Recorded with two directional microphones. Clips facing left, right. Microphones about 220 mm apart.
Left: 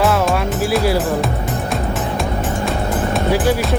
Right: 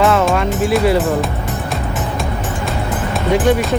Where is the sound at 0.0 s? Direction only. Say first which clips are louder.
Right 2 dB; 5° left (ahead or behind).